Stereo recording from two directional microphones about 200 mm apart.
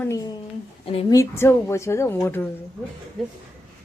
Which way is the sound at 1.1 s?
15° left (ahead or behind).